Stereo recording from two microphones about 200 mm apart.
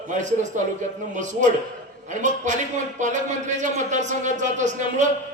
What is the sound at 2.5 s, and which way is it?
Speech, 35° right (ahead or behind).